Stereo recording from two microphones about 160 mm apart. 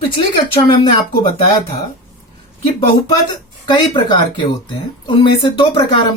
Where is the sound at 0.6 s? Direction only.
35° left (ahead or behind).